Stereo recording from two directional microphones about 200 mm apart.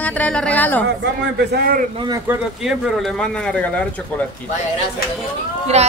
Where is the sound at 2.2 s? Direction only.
5° right (ahead or behind).